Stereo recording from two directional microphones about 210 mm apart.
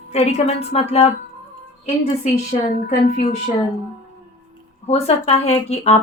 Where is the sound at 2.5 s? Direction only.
30° left (ahead or behind).